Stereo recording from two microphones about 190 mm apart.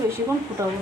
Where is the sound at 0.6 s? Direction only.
15° right (ahead or behind).